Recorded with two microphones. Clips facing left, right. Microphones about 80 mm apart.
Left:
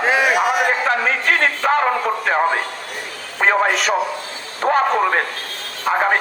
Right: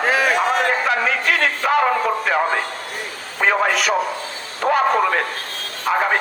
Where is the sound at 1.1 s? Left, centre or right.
Left.